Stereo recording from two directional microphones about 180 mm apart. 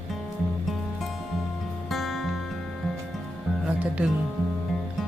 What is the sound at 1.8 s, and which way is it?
Music, centre (ahead or behind).